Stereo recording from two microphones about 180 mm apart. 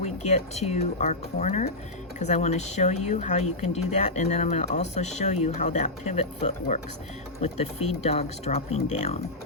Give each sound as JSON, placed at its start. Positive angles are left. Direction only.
{"t": 0.0, "sound": "speech", "side_deg": 40}